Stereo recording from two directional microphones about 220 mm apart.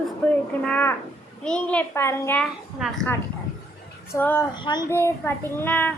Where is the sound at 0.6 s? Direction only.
5° left (ahead or behind).